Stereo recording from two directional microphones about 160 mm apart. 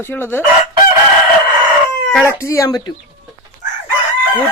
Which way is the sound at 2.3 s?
20° left (ahead or behind).